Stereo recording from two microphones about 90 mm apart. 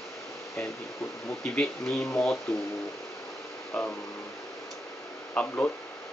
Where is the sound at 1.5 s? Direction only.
10° left (ahead or behind).